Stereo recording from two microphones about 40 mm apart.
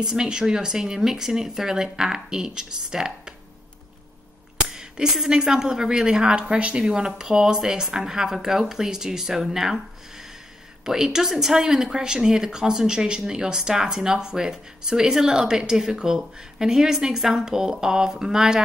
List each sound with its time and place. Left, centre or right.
0.0 s speech: centre
4.6 s a sound: centre
5.3 s a woman's voice: centre
6.8 s speech: centre